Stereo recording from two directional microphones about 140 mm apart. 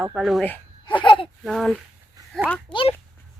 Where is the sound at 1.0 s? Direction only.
35° left (ahead or behind).